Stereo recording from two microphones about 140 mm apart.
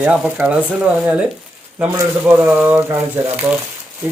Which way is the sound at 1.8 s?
10° right (ahead or behind).